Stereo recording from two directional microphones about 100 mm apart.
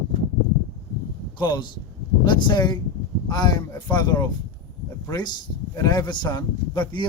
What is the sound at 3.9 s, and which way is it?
Speech, 40° left (ahead or behind).